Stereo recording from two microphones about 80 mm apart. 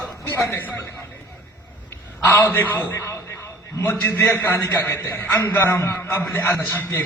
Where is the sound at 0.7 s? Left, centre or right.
Left.